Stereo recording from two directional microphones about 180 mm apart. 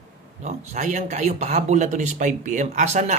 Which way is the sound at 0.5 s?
40° right (ahead or behind).